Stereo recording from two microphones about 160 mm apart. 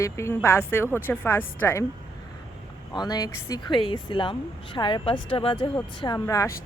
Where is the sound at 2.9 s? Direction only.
25° left (ahead or behind).